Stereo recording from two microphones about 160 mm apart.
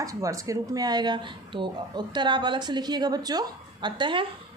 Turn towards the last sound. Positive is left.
turn(degrees=-30)  # may be behind; listen again after turning